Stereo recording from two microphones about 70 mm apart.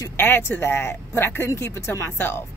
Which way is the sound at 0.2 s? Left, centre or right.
Left.